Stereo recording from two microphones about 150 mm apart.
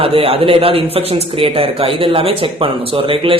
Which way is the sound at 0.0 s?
40° right (ahead or behind).